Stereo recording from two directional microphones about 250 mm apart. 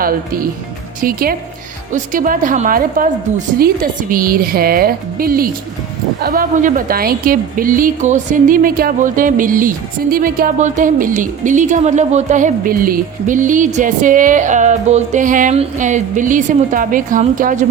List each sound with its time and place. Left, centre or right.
0.0 s a woman's voice: right